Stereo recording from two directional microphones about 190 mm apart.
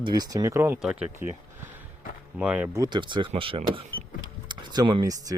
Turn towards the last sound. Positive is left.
turn(degrees=-20)  # may be behind; listen again after turning